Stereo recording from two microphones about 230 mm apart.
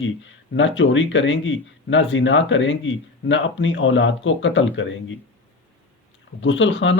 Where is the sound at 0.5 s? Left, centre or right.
Left.